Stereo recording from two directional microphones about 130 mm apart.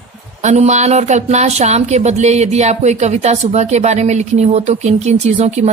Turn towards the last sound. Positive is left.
turn(degrees=-55)  # may be behind; listen again after turning